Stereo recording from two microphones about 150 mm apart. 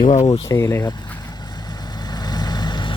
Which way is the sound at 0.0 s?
50° left (ahead or behind).